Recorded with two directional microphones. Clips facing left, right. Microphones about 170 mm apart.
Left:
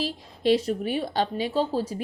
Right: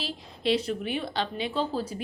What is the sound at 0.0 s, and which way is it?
A woman's voice, 40° left (ahead or behind).